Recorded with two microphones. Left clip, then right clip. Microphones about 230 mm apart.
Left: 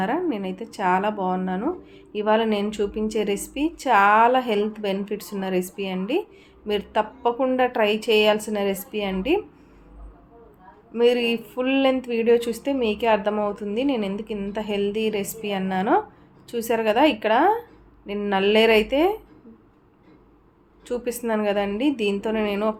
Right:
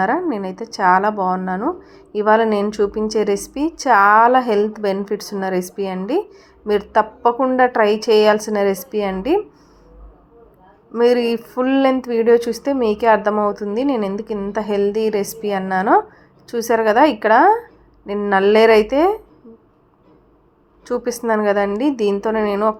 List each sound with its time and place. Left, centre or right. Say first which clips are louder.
0.0 s a woman's voice: right 6 dB; centre
5.0 s a woman's voice: right 7 dB; centre
5.3 s a woman's voice: right 2 dB; centre
10.9 s a woman's voice: right 5 dB; centre
12.4 s a woman's voice: right 5 dB; centre
12.6 s a woman's voice: right 6 dB; centre
20.9 s a woman's voice: right 6 dB; centre